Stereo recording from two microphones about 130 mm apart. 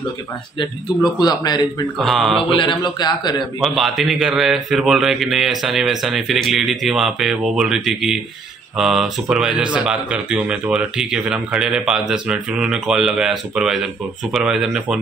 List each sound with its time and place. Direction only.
1.2 s a man's voice: 30° left (ahead or behind)
2.0 s speech: centre (ahead or behind)
2.5 s a man's voice: 40° left (ahead or behind)
3.6 s speech: centre (ahead or behind)